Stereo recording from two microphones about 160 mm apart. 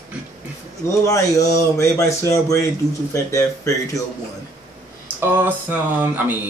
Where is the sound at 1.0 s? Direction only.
20° left (ahead or behind).